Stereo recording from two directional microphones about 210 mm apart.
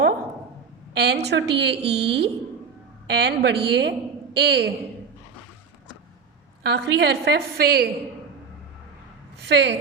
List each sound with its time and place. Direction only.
0.9 s a woman's voice: 50° right (ahead or behind)
6.7 s a woman's voice: 50° right (ahead or behind)
9.4 s a woman's voice: 50° right (ahead or behind)